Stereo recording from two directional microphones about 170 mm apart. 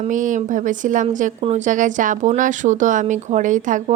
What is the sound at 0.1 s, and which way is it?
Speech, 50° right (ahead or behind).